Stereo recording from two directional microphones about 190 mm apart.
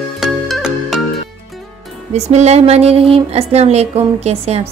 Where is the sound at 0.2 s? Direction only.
Centre (ahead or behind).